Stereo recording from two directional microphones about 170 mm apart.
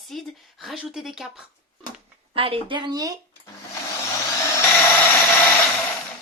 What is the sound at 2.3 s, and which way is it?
Speech, 35° right (ahead or behind).